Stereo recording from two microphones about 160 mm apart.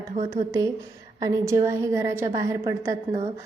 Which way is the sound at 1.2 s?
20° right (ahead or behind).